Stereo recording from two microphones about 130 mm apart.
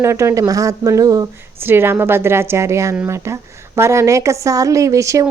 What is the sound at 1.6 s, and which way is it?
A woman's voice, 15° right (ahead or behind).